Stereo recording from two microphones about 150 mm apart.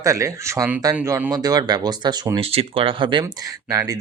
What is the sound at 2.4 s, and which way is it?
Speech, 40° right (ahead or behind).